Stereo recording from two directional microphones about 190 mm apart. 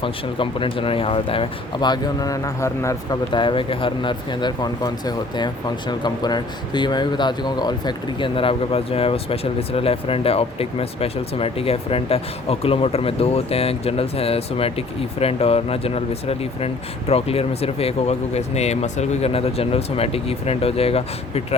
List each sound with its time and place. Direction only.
0.0 s speech: 25° left (ahead or behind)